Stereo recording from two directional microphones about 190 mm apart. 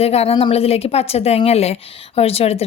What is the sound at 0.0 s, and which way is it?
A woman's voice, 35° left (ahead or behind).